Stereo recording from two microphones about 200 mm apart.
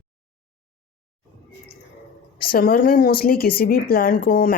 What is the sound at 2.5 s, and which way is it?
Speech, 45° left (ahead or behind).